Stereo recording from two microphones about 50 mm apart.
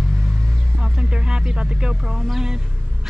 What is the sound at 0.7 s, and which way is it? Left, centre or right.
Music, centre.